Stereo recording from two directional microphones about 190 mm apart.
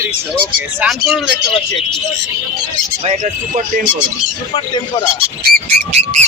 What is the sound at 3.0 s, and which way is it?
Speech, 40° right (ahead or behind).